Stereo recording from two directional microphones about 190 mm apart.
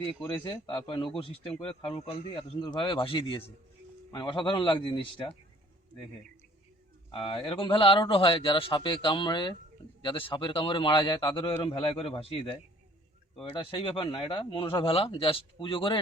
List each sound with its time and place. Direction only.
0.0 s speech: 10° left (ahead or behind)
0.4 s speech: 25° left (ahead or behind)
7.1 s speech: 30° left (ahead or behind)